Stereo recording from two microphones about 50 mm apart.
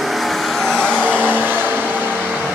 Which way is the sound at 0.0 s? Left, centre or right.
Centre.